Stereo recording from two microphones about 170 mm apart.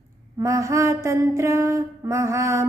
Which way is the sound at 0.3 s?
15° right (ahead or behind).